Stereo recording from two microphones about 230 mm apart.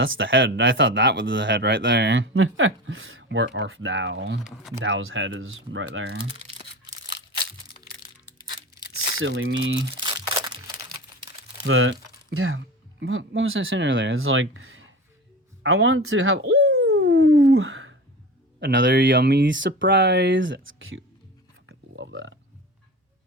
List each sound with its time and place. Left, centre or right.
0.0 s speech: right
9.1 s speech: right
11.6 s speech: right
17.0 s a sound: right
18.6 s speech: right
21.7 s a sound: right